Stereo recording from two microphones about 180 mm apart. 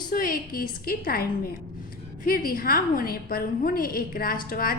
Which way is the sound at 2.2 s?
55° left (ahead or behind).